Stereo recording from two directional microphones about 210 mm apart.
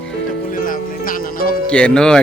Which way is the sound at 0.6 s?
40° left (ahead or behind).